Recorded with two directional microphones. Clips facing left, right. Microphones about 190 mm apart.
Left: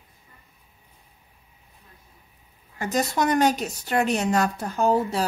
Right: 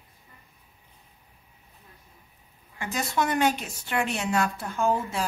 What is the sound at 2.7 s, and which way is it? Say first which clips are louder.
A woman's voice: left 4 dB; 40° left (ahead or behind).